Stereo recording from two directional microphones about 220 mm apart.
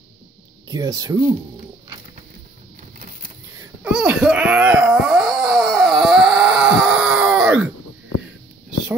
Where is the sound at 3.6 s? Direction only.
5° right (ahead or behind).